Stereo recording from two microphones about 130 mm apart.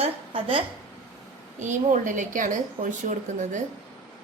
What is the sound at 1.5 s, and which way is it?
A woman's voice, 70° right (ahead or behind).